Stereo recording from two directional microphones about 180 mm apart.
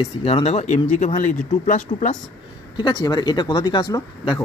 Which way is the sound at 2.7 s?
25° left (ahead or behind).